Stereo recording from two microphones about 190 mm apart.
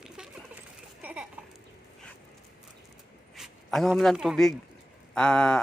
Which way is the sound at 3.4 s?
Centre (ahead or behind).